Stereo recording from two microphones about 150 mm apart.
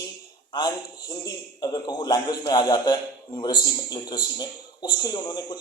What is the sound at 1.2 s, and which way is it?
A man's voice, 25° left (ahead or behind).